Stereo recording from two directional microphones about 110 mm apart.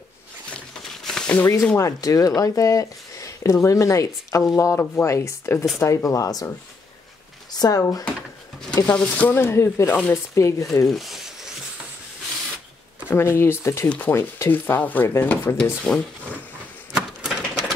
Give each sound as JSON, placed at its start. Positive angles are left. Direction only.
{"t": 1.0, "sound": "a sound", "side_deg": 5}
{"t": 1.3, "sound": "speech", "side_deg": 25}
{"t": 7.5, "sound": "speech", "side_deg": 35}
{"t": 8.8, "sound": "speech", "side_deg": 15}
{"t": 10.9, "sound": "speech", "side_deg": 0}
{"t": 13.1, "sound": "speech", "side_deg": 20}
{"t": 13.8, "sound": "speech", "side_deg": 15}
{"t": 14.1, "sound": "speech", "side_deg": 25}
{"t": 16.9, "sound": "a sound", "side_deg": -5}